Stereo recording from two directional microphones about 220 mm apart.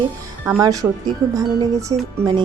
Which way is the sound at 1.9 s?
20° right (ahead or behind).